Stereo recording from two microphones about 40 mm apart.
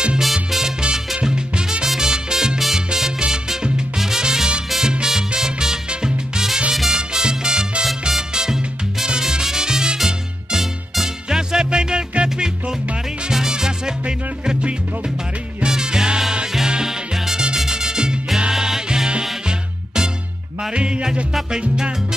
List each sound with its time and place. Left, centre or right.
0.2 s salsa music: centre
3.2 s music: centre
4.6 s salsa music: centre
5.9 s music: centre
7.0 s salsa music: centre
8.1 s music: centre
20.7 s music: right